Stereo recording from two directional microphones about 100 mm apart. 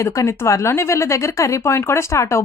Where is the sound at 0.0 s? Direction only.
30° left (ahead or behind).